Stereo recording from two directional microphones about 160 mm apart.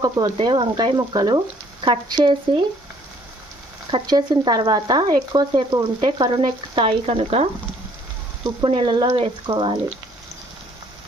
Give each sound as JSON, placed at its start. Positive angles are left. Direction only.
{"t": 0.0, "sound": "speech", "side_deg": -25}
{"t": 3.9, "sound": "speech", "side_deg": -25}
{"t": 8.5, "sound": "speech", "side_deg": -30}